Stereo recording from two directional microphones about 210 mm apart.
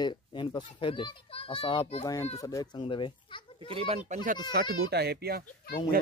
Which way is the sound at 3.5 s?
25° right (ahead or behind).